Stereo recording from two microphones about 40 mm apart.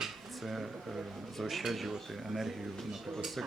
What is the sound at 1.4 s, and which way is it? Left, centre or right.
Speech, centre.